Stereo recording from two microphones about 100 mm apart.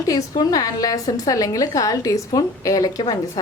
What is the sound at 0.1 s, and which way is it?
Speech, 40° left (ahead or behind).